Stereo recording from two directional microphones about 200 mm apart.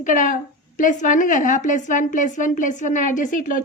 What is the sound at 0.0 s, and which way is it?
A woman's voice, 40° left (ahead or behind).